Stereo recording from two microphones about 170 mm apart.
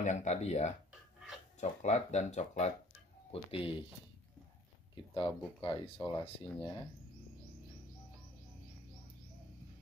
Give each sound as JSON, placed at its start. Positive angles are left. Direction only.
{"t": 0.0, "sound": "speech", "side_deg": 45}
{"t": 5.1, "sound": "speech", "side_deg": 30}